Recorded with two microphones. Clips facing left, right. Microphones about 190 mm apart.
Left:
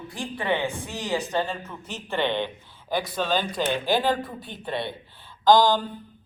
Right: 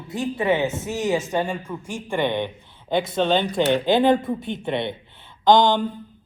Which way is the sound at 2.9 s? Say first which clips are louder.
Right 5 dB; 25° right (ahead or behind).